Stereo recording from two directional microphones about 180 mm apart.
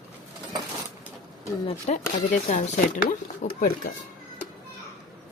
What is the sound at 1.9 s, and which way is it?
A woman's voice, 40° left (ahead or behind).